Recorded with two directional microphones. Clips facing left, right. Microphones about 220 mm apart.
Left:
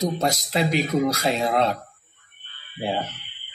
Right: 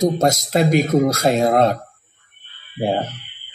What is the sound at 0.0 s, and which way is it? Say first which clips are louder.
A man's voice: right 7 dB; 45° right (ahead or behind).